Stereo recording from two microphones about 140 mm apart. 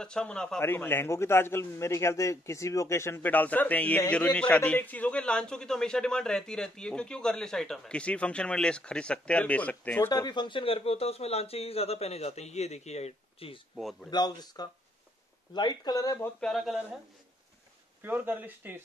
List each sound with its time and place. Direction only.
0.0 s a man's voice: 5° left (ahead or behind)
10.0 s speech: 30° left (ahead or behind); by 13.6 s 45° left (ahead or behind)
14.1 s speech: 30° left (ahead or behind)
16.3 s a man's voice: centre (ahead or behind)
18.0 s speech: 15° right (ahead or behind)